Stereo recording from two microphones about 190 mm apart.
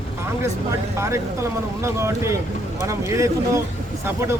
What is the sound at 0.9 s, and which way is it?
Speech, 15° right (ahead or behind).